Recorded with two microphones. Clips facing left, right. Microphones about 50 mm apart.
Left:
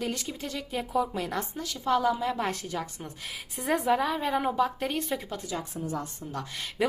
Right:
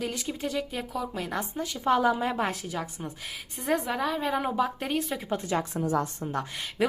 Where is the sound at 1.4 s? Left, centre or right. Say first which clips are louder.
Right 2 dB; centre.